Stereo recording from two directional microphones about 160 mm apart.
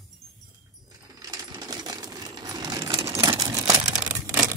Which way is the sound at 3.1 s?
25° right (ahead or behind).